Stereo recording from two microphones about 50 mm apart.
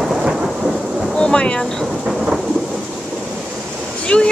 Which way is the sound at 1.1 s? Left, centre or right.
Centre.